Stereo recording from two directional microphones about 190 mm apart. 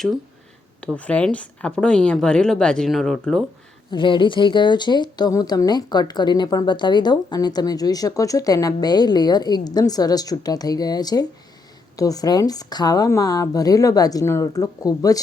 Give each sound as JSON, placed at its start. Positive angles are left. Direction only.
{"t": 0.9, "sound": "a woman's voice", "side_deg": 5}
{"t": 3.9, "sound": "speech", "side_deg": 25}